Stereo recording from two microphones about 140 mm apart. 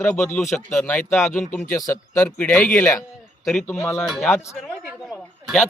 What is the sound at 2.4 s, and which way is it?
Speech, 5° left (ahead or behind).